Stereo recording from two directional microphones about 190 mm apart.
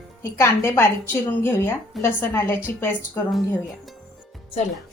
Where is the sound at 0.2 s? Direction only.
15° left (ahead or behind).